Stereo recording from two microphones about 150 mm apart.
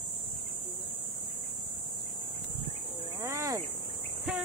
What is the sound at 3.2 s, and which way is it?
Cricket, 20° right (ahead or behind).